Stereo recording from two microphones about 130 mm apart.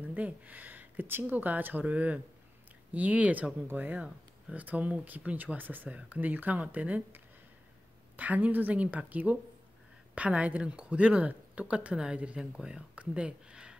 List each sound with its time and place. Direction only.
0.0 s speech: 10° right (ahead or behind)
8.2 s speech: 10° right (ahead or behind)